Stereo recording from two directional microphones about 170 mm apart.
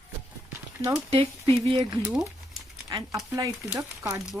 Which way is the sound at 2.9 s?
20° right (ahead or behind).